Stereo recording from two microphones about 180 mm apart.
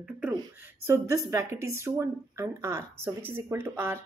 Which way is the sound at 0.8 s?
15° right (ahead or behind).